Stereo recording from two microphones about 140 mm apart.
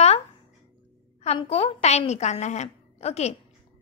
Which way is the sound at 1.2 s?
50° left (ahead or behind).